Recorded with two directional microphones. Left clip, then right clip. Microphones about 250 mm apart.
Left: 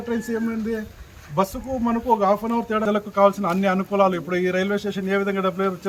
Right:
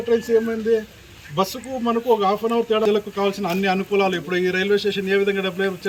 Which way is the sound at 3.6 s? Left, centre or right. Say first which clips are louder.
Even; centre.